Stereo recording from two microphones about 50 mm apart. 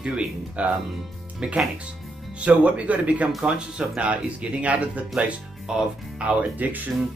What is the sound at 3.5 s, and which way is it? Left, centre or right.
Speech, centre.